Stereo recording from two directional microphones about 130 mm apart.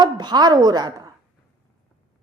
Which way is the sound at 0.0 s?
35° right (ahead or behind).